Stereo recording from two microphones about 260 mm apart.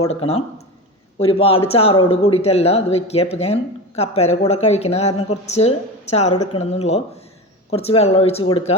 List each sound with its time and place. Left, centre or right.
0.1 s speech: left